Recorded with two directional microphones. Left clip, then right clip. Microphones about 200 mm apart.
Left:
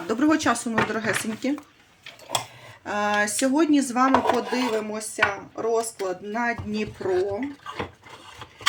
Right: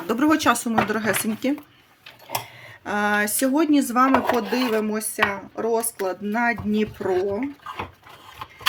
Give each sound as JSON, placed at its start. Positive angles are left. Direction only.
{"t": 0.1, "sound": "speech", "side_deg": -30}
{"t": 2.8, "sound": "speech", "side_deg": -35}